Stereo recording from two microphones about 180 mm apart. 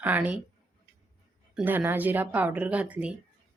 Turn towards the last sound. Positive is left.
turn(degrees=-10)  # may be behind; listen again after turning